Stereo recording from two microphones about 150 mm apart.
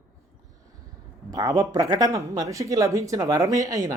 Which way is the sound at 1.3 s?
25° right (ahead or behind).